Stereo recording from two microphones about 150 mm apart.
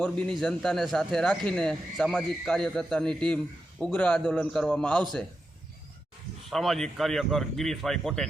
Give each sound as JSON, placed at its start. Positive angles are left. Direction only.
{"t": 0.0, "sound": "a man's voice", "side_deg": 5}
{"t": 6.5, "sound": "a man's voice", "side_deg": 0}